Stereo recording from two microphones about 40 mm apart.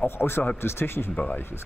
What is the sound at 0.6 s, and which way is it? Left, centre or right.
Speech, left.